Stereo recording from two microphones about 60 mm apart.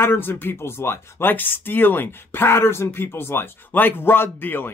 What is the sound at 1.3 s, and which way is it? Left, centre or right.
Speech, left.